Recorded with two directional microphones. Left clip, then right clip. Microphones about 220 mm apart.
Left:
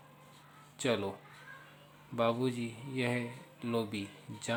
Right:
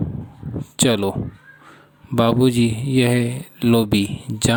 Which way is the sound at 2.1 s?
45° right (ahead or behind).